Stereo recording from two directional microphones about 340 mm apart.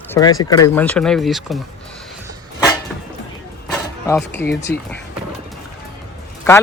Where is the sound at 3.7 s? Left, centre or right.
Centre.